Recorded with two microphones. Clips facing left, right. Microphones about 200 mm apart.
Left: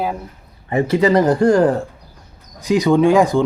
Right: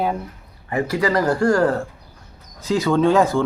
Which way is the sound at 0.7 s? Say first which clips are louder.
Left 5 dB; 25° left (ahead or behind).